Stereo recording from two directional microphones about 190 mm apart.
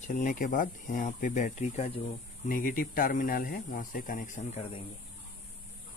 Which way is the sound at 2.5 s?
45° left (ahead or behind).